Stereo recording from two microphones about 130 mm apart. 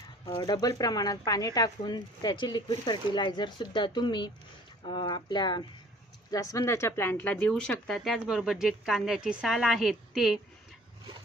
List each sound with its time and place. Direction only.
0.3 s speech: 35° left (ahead or behind); by 10.4 s centre (ahead or behind)